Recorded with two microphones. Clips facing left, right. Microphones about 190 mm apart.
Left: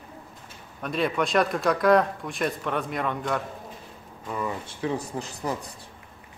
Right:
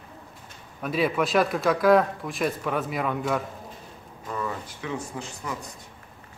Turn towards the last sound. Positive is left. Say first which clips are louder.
# left 4 dB
turn(degrees=35)  # may be behind; listen again after turning